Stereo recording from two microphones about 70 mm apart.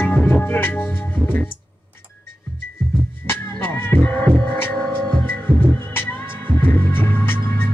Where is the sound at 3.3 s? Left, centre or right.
Left.